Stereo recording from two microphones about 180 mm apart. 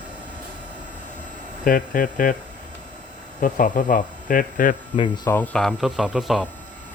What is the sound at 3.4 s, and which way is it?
Speech, 45° left (ahead or behind).